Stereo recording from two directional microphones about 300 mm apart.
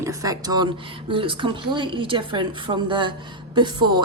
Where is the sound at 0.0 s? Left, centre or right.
Centre.